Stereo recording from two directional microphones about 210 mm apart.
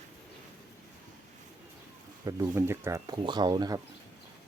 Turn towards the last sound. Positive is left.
turn(degrees=-20)  # may be behind; listen again after turning